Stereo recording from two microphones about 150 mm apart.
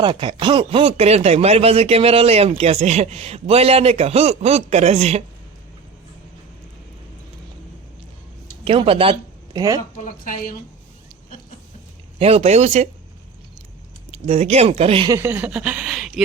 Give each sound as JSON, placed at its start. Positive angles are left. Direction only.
{"t": 0.0, "sound": "speech", "side_deg": -35}
{"t": 8.6, "sound": "speech", "side_deg": -40}
{"t": 9.6, "sound": "speech", "side_deg": -25}
{"t": 10.0, "sound": "a woman's voice", "side_deg": 65}
{"t": 12.2, "sound": "speech", "side_deg": -40}
{"t": 14.1, "sound": "speech", "side_deg": -45}
{"t": 15.1, "sound": "speech", "side_deg": -15}